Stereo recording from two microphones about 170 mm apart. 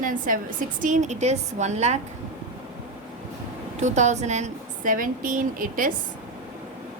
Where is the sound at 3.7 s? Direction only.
45° right (ahead or behind).